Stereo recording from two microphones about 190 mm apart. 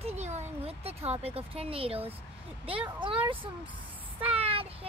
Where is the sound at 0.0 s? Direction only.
35° right (ahead or behind).